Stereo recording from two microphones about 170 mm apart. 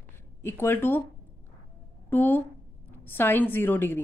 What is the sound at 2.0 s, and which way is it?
A woman's voice, 10° left (ahead or behind).